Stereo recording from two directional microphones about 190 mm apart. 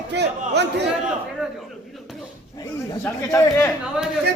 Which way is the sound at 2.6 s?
15° left (ahead or behind).